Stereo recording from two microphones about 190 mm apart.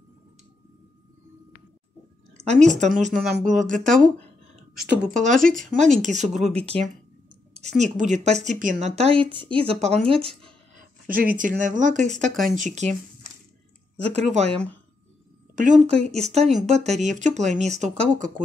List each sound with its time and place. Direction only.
2.4 s speech: 40° right (ahead or behind)
3.8 s speech: centre (ahead or behind)
5.2 s speech: 45° right (ahead or behind)
10.8 s a sound: 50° right (ahead or behind)
11.3 s speech: 45° right (ahead or behind)
12.1 s speech: centre (ahead or behind)
12.4 s speech: 40° right (ahead or behind)
16.0 s speech: centre (ahead or behind)
16.3 s speech: 35° right (ahead or behind)